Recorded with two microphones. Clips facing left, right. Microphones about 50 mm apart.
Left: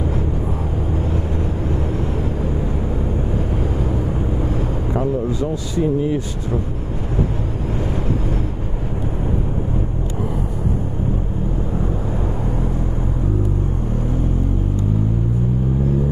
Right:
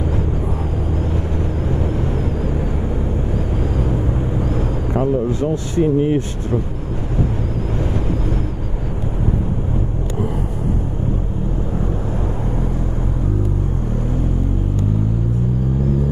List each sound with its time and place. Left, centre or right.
4.9 s speech: right